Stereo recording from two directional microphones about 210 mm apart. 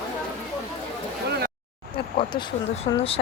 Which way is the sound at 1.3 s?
50° right (ahead or behind).